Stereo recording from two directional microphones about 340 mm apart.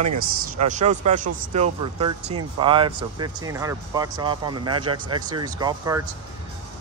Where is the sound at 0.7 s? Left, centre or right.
Right.